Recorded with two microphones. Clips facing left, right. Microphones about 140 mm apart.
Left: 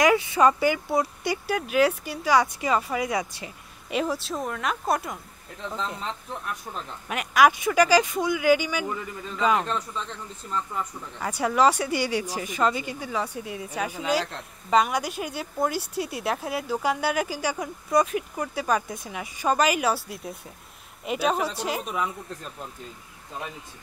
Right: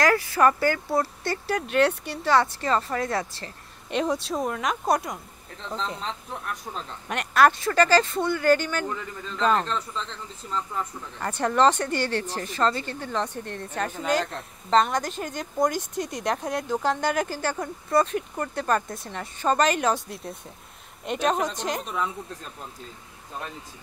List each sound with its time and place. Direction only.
0.0 s speech: 20° left (ahead or behind)
0.8 s speech: centre (ahead or behind)